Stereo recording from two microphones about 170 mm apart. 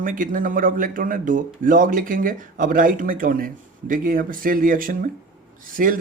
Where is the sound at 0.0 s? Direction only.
50° right (ahead or behind).